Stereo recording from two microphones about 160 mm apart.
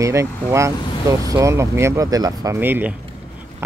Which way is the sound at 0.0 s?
20° right (ahead or behind).